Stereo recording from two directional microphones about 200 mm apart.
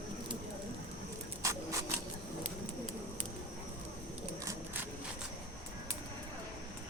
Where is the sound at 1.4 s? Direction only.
15° right (ahead or behind).